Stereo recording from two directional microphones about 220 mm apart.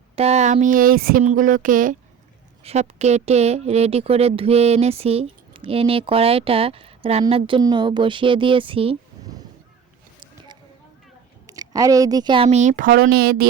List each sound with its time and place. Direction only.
0.2 s a woman's voice: 30° right (ahead or behind)
11.4 s a woman's voice: 15° right (ahead or behind); by 13.5 s 45° right (ahead or behind)